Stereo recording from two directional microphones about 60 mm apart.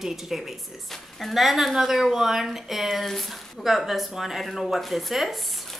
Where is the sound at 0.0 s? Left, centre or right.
Centre.